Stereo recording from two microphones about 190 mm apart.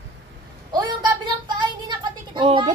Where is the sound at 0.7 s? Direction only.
20° right (ahead or behind).